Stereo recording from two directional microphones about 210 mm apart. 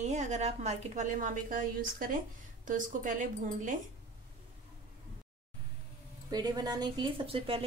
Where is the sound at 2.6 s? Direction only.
40° right (ahead or behind).